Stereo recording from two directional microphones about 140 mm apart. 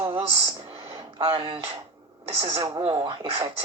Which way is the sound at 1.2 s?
40° right (ahead or behind).